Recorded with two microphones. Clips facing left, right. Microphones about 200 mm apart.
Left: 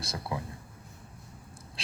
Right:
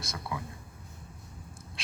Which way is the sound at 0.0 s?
30° left (ahead or behind).